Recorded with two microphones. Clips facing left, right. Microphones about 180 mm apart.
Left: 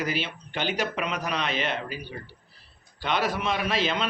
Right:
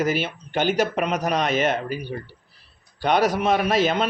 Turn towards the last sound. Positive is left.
turn(degrees=-45)  # may be behind; listen again after turning